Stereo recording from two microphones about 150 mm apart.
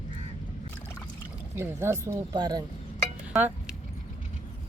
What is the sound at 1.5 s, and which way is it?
Speech, 15° right (ahead or behind).